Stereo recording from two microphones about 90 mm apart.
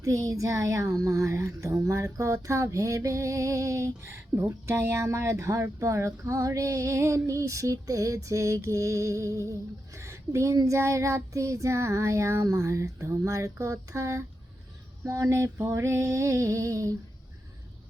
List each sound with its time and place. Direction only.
0.0 s speech: 40° right (ahead or behind)